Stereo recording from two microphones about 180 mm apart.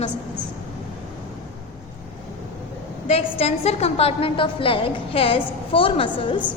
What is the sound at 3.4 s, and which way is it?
A woman's voice, 35° left (ahead or behind).